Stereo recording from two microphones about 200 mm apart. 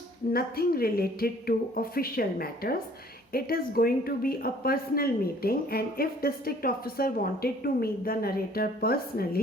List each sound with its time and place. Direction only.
0.3 s a woman's voice: 50° left (ahead or behind)